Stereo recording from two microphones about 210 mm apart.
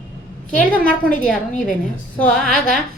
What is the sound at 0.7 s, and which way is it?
Speech, 5° left (ahead or behind).